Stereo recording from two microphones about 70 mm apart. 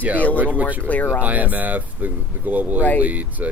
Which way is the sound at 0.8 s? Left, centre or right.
Left.